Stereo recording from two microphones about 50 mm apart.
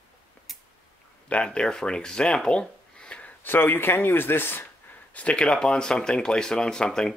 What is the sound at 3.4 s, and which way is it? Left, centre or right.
Speech, left.